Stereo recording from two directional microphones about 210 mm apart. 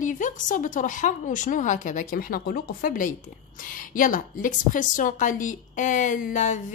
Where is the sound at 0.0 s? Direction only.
35° left (ahead or behind).